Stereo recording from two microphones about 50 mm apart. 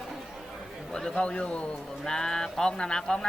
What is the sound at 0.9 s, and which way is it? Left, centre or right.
Speech, centre.